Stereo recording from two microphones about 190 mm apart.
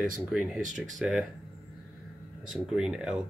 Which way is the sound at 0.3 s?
5° right (ahead or behind).